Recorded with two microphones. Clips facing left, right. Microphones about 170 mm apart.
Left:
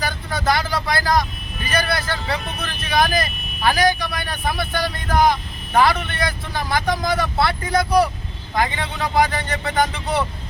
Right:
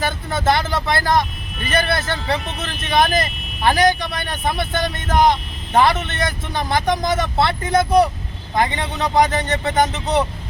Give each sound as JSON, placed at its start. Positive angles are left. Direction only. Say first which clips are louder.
{"t": 0.0, "sound": "vehicle", "louder": "right 3 dB", "side_deg": -25}
{"t": 1.7, "sound": "speech", "louder": "right 2 dB", "side_deg": -25}